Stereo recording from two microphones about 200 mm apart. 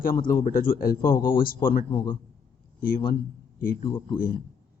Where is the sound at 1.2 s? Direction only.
20° left (ahead or behind).